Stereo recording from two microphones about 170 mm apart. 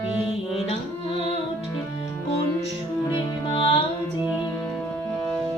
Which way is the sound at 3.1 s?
30° left (ahead or behind).